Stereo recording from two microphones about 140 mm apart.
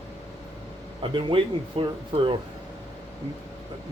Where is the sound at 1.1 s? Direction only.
35° right (ahead or behind).